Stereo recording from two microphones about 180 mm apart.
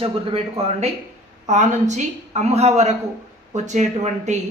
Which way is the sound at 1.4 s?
40° right (ahead or behind).